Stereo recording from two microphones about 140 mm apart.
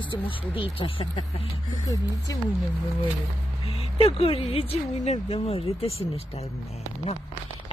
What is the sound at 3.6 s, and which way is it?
Speech, 45° left (ahead or behind).